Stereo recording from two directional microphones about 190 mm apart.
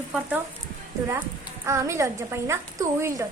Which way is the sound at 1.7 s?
15° right (ahead or behind).